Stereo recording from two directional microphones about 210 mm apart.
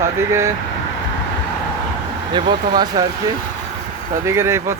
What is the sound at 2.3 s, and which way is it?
Speech, 20° right (ahead or behind).